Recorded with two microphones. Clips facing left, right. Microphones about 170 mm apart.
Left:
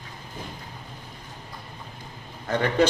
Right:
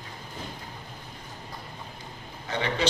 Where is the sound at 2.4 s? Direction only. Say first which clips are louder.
Left 6 dB; 50° left (ahead or behind).